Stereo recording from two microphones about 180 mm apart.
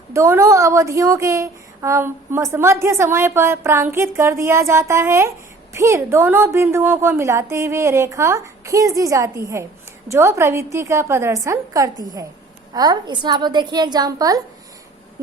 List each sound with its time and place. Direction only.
0.1 s a woman's voice: 15° right (ahead or behind)